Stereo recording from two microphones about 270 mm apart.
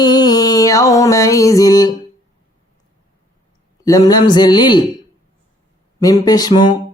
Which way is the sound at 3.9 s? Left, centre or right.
Centre.